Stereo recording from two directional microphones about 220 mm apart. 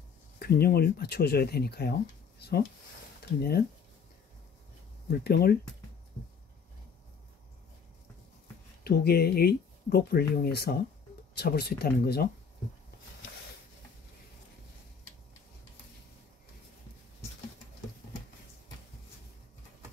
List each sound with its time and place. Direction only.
0.4 s speech: 45° left (ahead or behind)
5.1 s speech: 45° left (ahead or behind)
8.8 s speech: 45° left (ahead or behind)